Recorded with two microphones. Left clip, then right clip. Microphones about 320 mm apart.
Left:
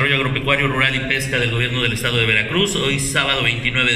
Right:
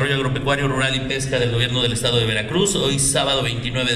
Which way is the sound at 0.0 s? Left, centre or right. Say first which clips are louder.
Left 3 dB; right.